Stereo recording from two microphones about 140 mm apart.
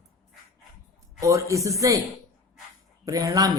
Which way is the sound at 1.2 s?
20° right (ahead or behind).